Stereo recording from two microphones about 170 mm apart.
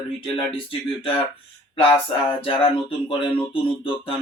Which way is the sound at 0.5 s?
30° left (ahead or behind).